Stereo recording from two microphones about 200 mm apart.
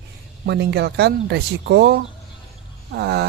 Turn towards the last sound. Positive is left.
turn(degrees=-55)  # may be behind; listen again after turning